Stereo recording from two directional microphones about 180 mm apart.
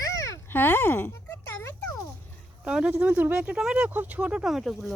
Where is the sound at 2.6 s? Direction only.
5° right (ahead or behind).